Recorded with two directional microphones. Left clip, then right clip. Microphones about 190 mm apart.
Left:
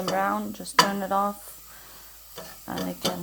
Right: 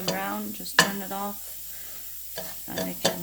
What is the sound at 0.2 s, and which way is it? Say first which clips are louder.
Speech: left 6 dB; 15° left (ahead or behind).